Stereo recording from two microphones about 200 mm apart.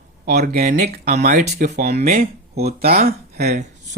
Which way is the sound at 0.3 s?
55° right (ahead or behind).